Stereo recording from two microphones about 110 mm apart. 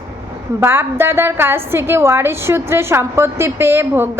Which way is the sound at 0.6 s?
20° right (ahead or behind).